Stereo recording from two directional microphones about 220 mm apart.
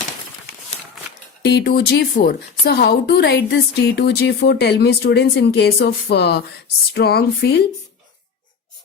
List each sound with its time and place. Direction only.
1.4 s a woman's voice: 50° left (ahead or behind)